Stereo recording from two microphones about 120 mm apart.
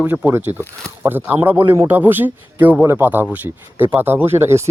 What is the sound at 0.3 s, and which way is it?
Speech, 15° right (ahead or behind).